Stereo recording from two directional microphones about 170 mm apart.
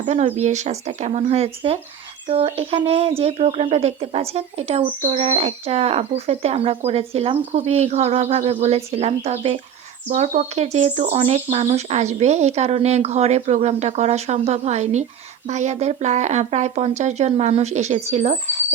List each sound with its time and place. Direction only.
0.0 s speech: 40° right (ahead or behind)